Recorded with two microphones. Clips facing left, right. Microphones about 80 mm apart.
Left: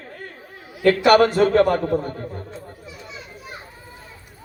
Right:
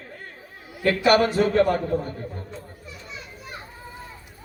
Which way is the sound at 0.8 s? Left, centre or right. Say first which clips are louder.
Left 5 dB; left.